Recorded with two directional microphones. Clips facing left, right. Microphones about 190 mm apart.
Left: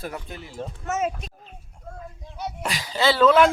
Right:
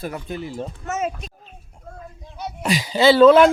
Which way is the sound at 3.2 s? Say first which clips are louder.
Right 4 dB; 35° right (ahead or behind).